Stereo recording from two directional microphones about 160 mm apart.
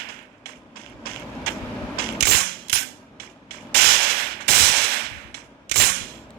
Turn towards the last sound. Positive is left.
turn(degrees=-80)